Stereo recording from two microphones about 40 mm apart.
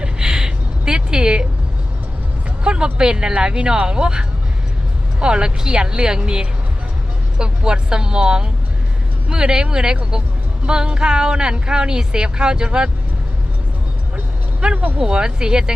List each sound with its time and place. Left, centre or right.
0.0 s gasp: right
2.6 s speech: right
14.6 s speech: right
15.0 s speech: centre